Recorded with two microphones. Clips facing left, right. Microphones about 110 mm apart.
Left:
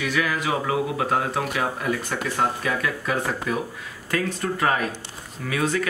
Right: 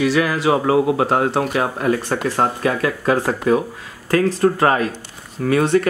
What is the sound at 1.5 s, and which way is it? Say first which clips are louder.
Speech: right 6 dB; 45° right (ahead or behind).